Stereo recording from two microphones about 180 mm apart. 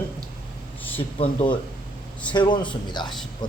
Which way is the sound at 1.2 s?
30° left (ahead or behind).